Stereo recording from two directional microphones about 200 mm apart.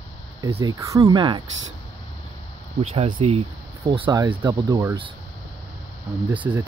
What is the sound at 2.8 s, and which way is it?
Speech, 30° right (ahead or behind).